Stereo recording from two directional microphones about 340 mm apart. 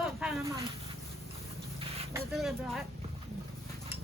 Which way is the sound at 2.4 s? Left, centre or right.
Centre.